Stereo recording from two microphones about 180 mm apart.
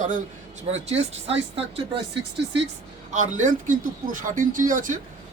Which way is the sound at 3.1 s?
45° right (ahead or behind).